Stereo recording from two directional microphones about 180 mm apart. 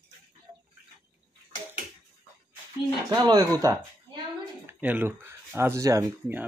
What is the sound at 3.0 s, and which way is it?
Speech, 20° right (ahead or behind).